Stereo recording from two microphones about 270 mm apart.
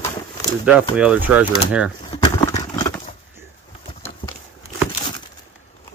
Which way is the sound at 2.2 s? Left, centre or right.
Centre.